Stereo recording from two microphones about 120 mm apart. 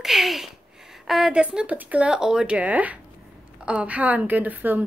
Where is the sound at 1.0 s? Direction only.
5° right (ahead or behind).